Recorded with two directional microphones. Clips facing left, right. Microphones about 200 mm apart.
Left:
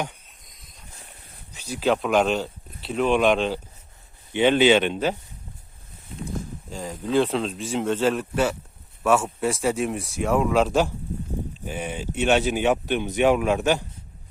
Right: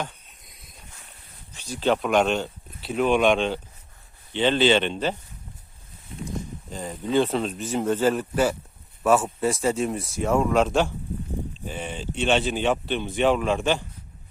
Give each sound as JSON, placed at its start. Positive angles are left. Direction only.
{"t": 1.5, "sound": "speech", "side_deg": 10}
{"t": 4.3, "sound": "speech", "side_deg": 10}
{"t": 6.7, "sound": "speech", "side_deg": 0}